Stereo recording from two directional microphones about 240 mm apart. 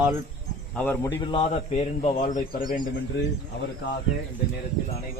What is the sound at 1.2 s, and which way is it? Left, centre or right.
Speech, left.